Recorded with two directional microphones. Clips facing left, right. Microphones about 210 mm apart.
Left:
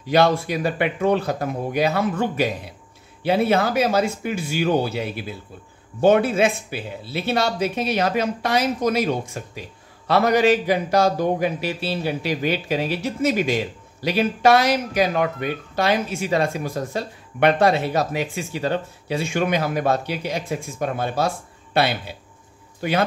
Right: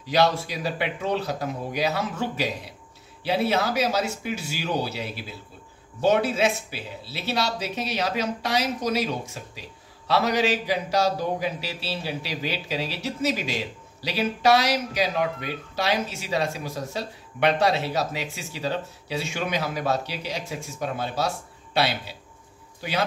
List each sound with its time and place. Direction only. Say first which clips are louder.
0.1 s speech: left 4 dB; 55° left (ahead or behind)
22.8 s speech: left 6 dB; 55° left (ahead or behind)